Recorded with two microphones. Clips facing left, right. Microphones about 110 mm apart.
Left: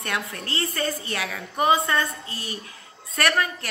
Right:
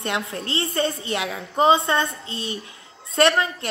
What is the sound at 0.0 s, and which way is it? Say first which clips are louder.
A woman's voice: right 3 dB; 25° right (ahead or behind).